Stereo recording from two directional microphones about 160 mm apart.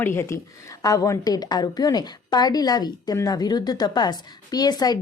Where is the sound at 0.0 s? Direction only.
15° left (ahead or behind).